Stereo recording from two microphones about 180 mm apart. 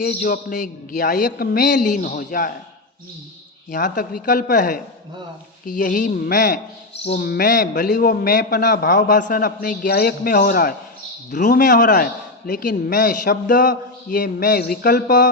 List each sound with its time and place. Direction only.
0.0 s speech: 55° left (ahead or behind)
3.7 s a man's voice: 50° left (ahead or behind)